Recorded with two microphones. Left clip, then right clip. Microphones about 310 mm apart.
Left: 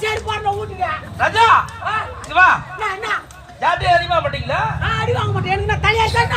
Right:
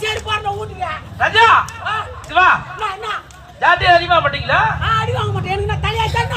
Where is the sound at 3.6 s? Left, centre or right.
Left.